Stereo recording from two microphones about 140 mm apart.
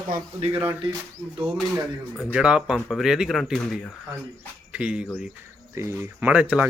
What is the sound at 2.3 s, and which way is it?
Speech, 5° right (ahead or behind).